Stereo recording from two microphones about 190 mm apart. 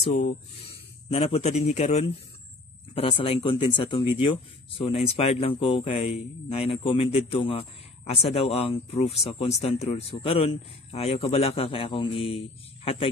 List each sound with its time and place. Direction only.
0.0 s speech: 35° left (ahead or behind)